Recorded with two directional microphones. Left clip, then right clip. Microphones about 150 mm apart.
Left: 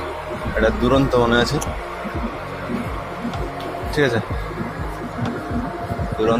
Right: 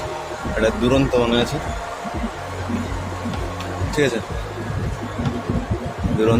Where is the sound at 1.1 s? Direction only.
5° left (ahead or behind).